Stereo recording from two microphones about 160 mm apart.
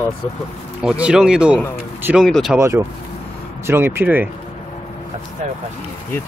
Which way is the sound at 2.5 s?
15° right (ahead or behind).